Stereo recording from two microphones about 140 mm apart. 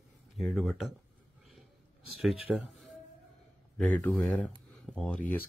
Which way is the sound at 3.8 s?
10° left (ahead or behind).